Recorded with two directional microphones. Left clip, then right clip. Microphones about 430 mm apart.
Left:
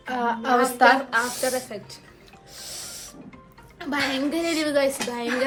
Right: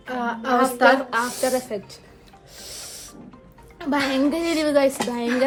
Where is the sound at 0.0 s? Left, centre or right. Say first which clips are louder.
Left 1 dB; centre.